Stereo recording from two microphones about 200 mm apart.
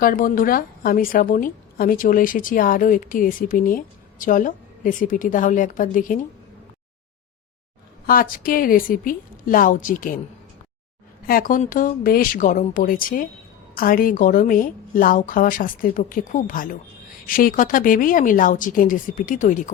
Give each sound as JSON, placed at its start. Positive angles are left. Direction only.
{"t": 0.0, "sound": "a woman's voice", "side_deg": 45}
{"t": 8.0, "sound": "a woman's voice", "side_deg": 45}
{"t": 11.3, "sound": "a woman's voice", "side_deg": 45}